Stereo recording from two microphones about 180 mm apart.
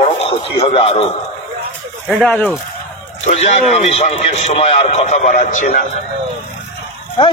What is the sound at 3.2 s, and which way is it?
A man's voice, 40° left (ahead or behind).